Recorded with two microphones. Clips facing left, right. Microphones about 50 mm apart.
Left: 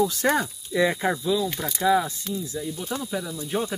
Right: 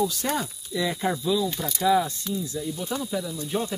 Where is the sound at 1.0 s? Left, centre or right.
Centre.